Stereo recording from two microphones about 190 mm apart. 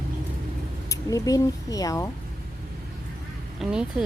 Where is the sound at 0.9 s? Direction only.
20° left (ahead or behind).